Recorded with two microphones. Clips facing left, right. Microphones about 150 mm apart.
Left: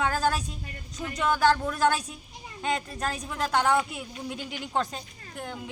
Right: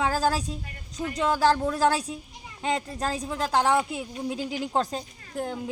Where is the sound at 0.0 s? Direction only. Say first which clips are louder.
Right 2 dB; 30° right (ahead or behind).